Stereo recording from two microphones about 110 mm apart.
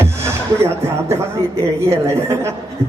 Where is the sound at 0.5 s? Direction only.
25° right (ahead or behind).